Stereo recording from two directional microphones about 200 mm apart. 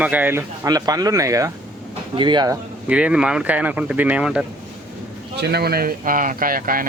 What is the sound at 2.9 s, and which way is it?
Speech, 5° right (ahead or behind).